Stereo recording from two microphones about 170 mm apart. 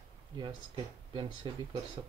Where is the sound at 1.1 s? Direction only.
25° right (ahead or behind).